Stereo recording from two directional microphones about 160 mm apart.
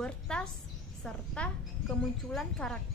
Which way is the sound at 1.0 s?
5° left (ahead or behind).